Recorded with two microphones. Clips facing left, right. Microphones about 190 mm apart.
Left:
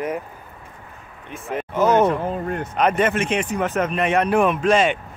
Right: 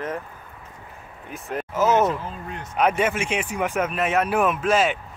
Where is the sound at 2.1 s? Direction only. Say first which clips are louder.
Left 7 dB; 55° left (ahead or behind).